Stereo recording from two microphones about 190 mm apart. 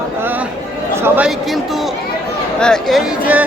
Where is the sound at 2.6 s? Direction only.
Centre (ahead or behind).